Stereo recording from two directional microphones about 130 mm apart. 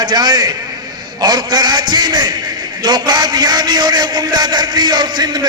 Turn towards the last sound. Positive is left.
turn(degrees=-30)  # may be behind; listen again after turning